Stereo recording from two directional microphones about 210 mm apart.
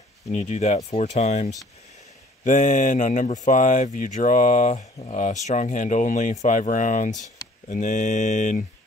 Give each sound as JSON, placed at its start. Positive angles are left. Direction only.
{"t": 0.3, "sound": "speech", "side_deg": 35}